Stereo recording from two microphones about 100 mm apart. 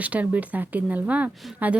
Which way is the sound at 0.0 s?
15° right (ahead or behind).